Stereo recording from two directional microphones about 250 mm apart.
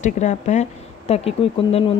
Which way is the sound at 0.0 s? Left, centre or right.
Left.